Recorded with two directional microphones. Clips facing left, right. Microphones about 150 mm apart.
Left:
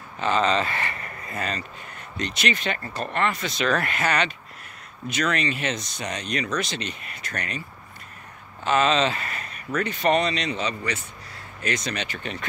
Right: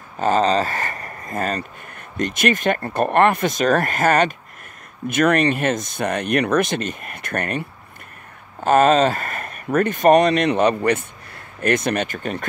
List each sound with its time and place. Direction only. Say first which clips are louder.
0.2 s speech: right 5 dB; 40° right (ahead or behind)